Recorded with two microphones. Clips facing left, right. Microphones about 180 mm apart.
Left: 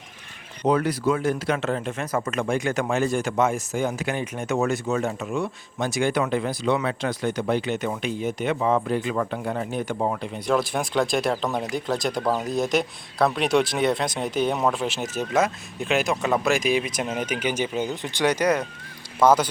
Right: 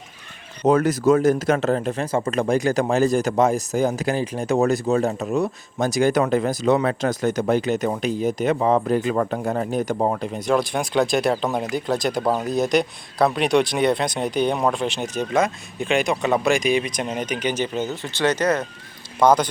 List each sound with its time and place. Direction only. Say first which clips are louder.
0.6 s speech: right 4 dB; 45° right (ahead or behind)
10.5 s speech: right 2 dB; centre (ahead or behind)